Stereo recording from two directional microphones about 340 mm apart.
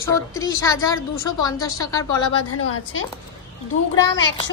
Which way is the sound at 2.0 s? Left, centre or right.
Left.